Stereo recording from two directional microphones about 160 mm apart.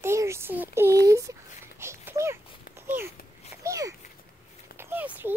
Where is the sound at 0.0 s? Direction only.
15° right (ahead or behind).